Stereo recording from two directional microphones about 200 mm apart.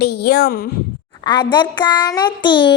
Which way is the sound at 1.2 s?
20° left (ahead or behind).